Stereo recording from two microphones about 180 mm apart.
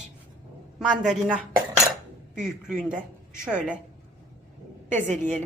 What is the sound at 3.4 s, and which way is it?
Speech, 5° right (ahead or behind).